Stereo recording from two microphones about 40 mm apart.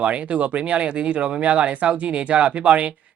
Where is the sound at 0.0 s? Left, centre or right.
Right.